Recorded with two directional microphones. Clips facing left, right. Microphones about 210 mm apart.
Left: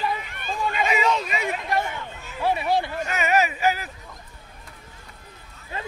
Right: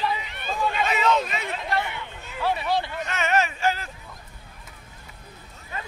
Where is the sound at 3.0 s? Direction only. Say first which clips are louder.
Left 2 dB; 5° left (ahead or behind).